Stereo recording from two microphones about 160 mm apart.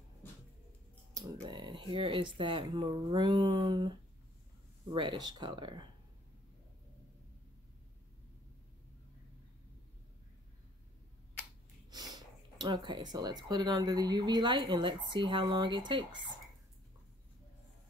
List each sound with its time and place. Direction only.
1.1 s speech: 25° right (ahead or behind)
4.9 s speech: 30° right (ahead or behind)
11.9 s speech: 25° right (ahead or behind)